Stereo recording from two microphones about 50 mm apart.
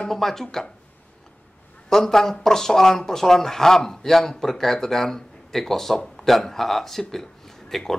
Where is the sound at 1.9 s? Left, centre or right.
Centre.